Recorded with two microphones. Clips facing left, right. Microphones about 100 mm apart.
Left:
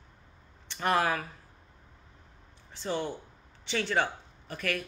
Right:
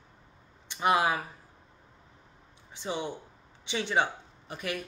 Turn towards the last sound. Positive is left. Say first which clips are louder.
# left 2 dB
turn(degrees=-15)  # may be behind; listen again after turning